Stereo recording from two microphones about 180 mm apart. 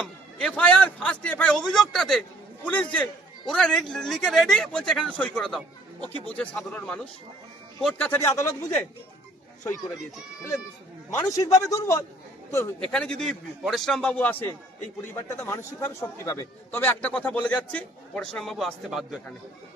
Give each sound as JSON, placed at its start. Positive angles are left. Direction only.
{"t": 0.0, "sound": "a man's voice", "side_deg": 5}
{"t": 11.2, "sound": "a man's voice", "side_deg": 20}